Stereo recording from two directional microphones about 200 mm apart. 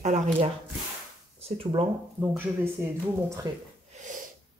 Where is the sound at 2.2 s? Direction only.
10° right (ahead or behind).